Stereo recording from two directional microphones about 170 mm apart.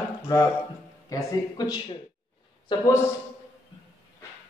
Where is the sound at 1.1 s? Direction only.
20° left (ahead or behind).